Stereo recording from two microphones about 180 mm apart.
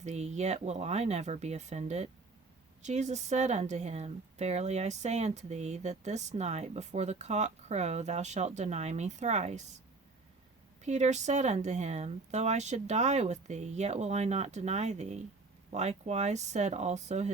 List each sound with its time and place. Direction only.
0.0 s speech: 40° right (ahead or behind)
10.8 s speech: 40° right (ahead or behind)